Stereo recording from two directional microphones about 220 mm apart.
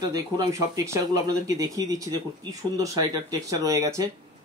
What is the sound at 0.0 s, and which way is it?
Speech, 15° right (ahead or behind).